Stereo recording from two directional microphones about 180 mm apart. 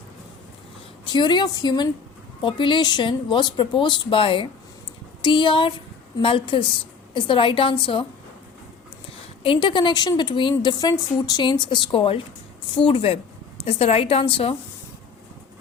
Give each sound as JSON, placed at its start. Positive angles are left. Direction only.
{"t": 1.0, "sound": "speech", "side_deg": 25}
{"t": 9.4, "sound": "a woman's voice", "side_deg": 30}